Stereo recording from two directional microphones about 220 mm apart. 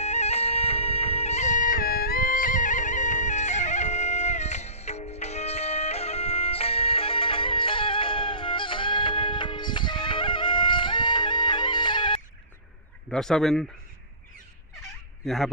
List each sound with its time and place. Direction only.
0.0 s bagpipes: 30° left (ahead or behind)
13.1 s speech: centre (ahead or behind)
15.2 s speech: centre (ahead or behind)